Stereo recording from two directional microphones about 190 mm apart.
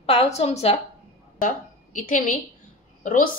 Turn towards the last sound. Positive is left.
turn(degrees=45)  # may be behind; listen again after turning